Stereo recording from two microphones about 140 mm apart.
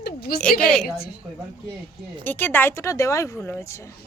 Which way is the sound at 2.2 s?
15° left (ahead or behind).